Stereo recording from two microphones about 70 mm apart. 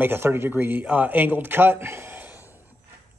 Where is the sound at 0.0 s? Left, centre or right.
Right.